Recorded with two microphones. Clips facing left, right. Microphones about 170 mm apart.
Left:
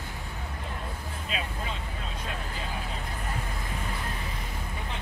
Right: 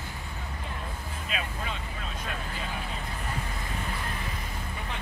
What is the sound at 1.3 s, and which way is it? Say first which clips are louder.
Vehicle: even; 30° left (ahead or behind).